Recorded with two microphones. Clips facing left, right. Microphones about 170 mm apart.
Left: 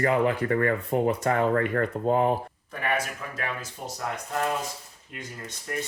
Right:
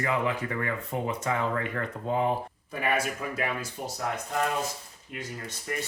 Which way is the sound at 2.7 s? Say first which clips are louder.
Even; 10° right (ahead or behind).